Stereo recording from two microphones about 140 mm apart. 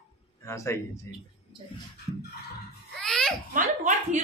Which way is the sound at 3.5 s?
65° right (ahead or behind).